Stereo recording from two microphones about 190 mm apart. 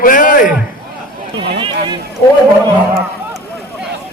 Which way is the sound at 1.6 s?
25° right (ahead or behind).